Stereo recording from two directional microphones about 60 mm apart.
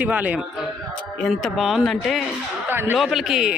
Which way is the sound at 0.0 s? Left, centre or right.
Right.